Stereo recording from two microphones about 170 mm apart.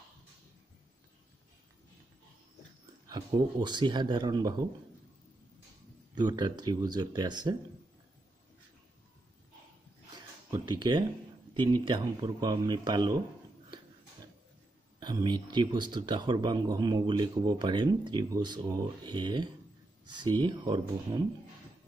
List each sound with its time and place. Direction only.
3.1 s speech: 25° right (ahead or behind)
6.1 s speech: 25° right (ahead or behind)
10.7 s speech: 25° right (ahead or behind)
15.0 s speech: 25° right (ahead or behind)